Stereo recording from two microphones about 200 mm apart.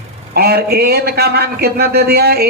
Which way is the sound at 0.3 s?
50° right (ahead or behind).